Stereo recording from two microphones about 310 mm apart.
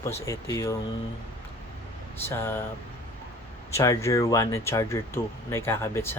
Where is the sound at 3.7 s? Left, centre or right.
Centre.